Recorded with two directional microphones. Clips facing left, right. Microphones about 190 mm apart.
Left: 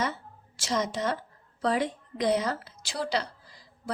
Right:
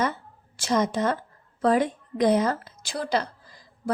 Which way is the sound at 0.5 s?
55° right (ahead or behind).